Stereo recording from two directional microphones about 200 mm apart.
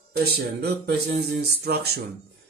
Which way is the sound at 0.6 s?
55° right (ahead or behind).